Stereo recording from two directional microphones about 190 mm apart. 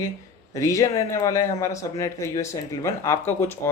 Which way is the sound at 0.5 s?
15° left (ahead or behind).